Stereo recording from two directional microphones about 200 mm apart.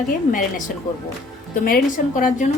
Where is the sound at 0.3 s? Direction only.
45° left (ahead or behind).